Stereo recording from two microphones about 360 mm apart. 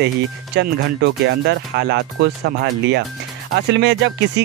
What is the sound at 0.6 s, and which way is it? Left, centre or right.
Speech, right.